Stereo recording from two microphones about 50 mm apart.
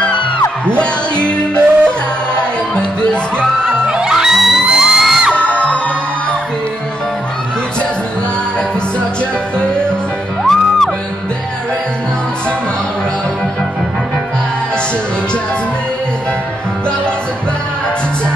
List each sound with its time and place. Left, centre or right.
0.7 s music: left
3.9 s music: centre
5.3 s music: left
10.4 s music: centre